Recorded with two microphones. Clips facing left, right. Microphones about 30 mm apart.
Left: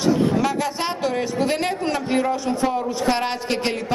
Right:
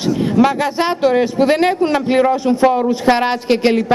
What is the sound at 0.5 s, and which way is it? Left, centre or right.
A man's voice, right.